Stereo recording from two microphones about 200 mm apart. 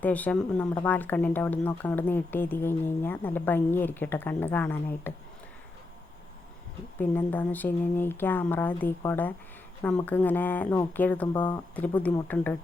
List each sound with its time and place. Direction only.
0.0 s speech: 5° left (ahead or behind)
7.0 s speech: 10° left (ahead or behind)
11.3 s speech: 20° left (ahead or behind)
11.8 s speech: 10° left (ahead or behind)